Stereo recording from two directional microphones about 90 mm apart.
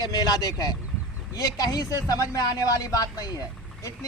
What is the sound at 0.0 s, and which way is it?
Speech, 45° left (ahead or behind).